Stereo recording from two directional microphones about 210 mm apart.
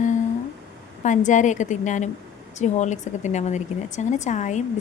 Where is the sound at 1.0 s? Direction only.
35° left (ahead or behind).